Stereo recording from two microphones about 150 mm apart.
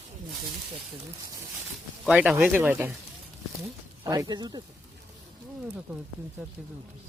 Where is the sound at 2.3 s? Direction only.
15° right (ahead or behind).